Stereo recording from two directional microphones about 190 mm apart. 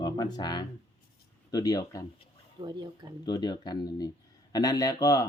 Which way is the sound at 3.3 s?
20° left (ahead or behind).